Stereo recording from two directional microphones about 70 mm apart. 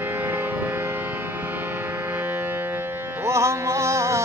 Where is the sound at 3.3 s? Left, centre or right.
Right.